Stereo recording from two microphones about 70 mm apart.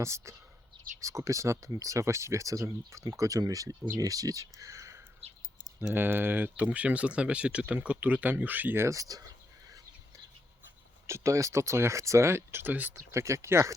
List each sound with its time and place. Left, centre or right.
0.0 s speech: right
5.9 s speech: right
8.8 s speech: right
11.0 s speech: right
13.1 s speech: right